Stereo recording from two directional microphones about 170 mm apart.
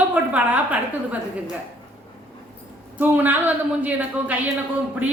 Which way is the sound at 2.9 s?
10° right (ahead or behind).